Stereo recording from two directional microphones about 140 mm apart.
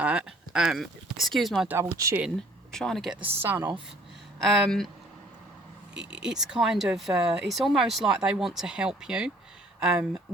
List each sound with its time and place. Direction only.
0.0 s speech: 5° right (ahead or behind)
1.6 s speech: 15° right (ahead or behind)
2.7 s speech: 5° left (ahead or behind)
3.2 s speech: 45° right (ahead or behind)
3.4 s speech: 15° right (ahead or behind)
4.4 s speech: centre (ahead or behind)
6.2 s speech: 5° right (ahead or behind)